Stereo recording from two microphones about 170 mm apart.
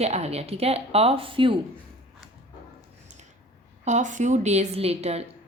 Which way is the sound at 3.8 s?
45° right (ahead or behind).